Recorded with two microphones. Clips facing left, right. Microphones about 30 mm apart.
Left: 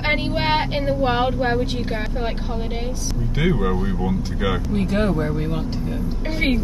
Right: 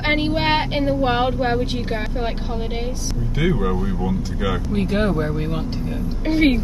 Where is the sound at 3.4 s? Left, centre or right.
Centre.